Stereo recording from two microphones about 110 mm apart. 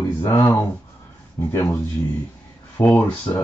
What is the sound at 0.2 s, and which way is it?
Speech, 25° left (ahead or behind).